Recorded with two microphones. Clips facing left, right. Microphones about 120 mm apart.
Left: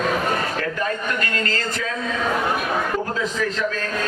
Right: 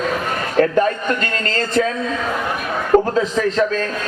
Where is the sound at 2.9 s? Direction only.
60° right (ahead or behind).